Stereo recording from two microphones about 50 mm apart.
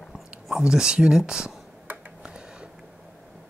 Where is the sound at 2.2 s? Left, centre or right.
Centre.